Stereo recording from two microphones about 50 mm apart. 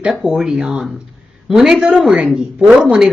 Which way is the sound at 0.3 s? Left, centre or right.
Centre.